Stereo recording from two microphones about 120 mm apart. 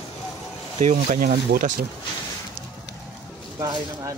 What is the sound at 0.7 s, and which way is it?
Speech, 75° right (ahead or behind).